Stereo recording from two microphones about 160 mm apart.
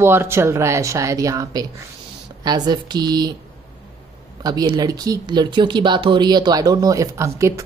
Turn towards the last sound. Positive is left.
turn(degrees=-20)  # may be behind; listen again after turning